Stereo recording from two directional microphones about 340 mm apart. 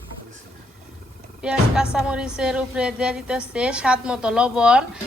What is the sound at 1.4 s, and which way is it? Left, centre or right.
Speech, centre.